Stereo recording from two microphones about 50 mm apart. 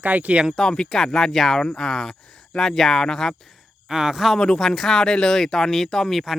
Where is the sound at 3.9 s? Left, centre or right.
Centre.